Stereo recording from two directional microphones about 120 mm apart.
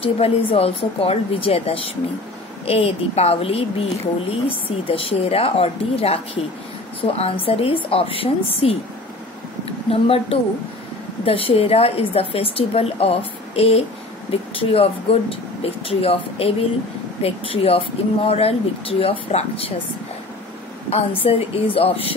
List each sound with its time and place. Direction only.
0.0 s a woman's voice: 55° left (ahead or behind)
21.2 s speech: 55° left (ahead or behind)